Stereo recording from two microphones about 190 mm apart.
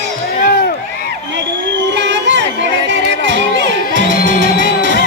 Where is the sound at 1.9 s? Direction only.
70° right (ahead or behind).